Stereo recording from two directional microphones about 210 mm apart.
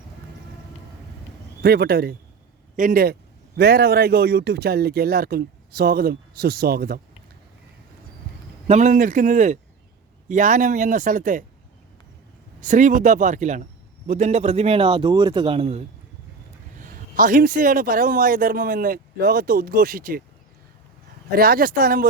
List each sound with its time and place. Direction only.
1.6 s a man's voice: 50° right (ahead or behind)
8.6 s speech: 35° right (ahead or behind)
12.6 s a man's voice: 35° right (ahead or behind)
16.7 s a man's voice: 40° right (ahead or behind)
21.2 s a man's voice: 45° right (ahead or behind)